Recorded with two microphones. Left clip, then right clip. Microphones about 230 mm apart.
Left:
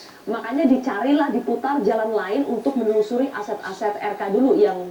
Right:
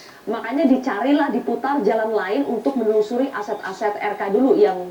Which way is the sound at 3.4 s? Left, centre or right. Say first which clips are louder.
Right 2 dB; centre.